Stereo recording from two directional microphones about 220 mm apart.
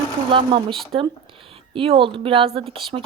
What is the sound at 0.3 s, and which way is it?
Speech, 25° right (ahead or behind).